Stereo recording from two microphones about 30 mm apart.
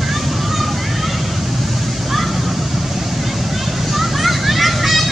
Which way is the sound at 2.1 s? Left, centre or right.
Centre.